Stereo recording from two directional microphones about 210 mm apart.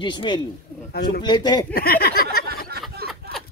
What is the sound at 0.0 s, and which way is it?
Speech, 20° left (ahead or behind).